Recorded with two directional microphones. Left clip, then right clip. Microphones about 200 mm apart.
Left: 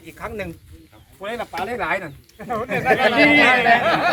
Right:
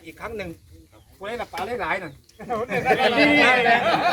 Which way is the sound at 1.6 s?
10° left (ahead or behind).